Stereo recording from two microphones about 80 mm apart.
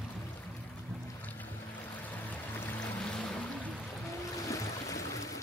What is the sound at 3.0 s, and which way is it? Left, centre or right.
Boat, centre.